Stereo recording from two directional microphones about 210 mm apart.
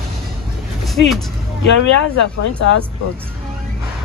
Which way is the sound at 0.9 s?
Centre (ahead or behind).